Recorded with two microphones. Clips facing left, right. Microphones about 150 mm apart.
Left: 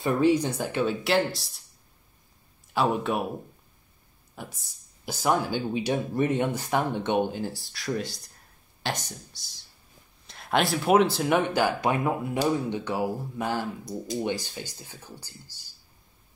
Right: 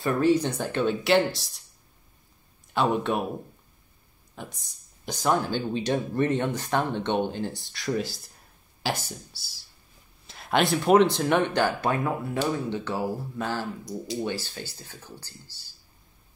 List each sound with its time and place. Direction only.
0.0 s speech: 15° left (ahead or behind)
2.7 s speech: 5° left (ahead or behind)
4.4 s speech: 5° left (ahead or behind)